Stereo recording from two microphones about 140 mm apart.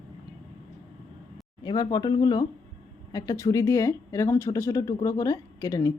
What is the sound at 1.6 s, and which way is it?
Speech, 25° left (ahead or behind).